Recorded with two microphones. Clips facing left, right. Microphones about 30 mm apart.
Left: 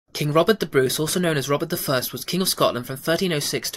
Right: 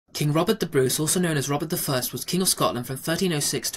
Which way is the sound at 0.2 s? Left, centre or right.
Centre.